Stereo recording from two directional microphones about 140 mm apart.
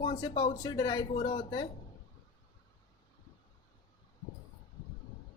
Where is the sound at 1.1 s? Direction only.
45° left (ahead or behind).